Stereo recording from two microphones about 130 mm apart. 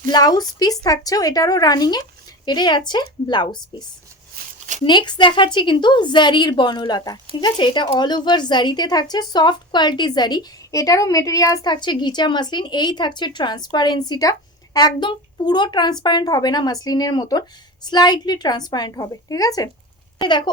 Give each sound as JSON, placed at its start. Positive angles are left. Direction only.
{"t": 0.1, "sound": "a woman's voice", "side_deg": 30}
{"t": 4.9, "sound": "a woman's voice", "side_deg": 35}